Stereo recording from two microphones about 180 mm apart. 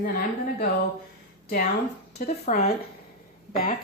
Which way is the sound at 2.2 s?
35° left (ahead or behind).